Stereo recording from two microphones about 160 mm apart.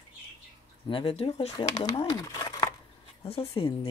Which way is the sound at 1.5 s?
25° left (ahead or behind).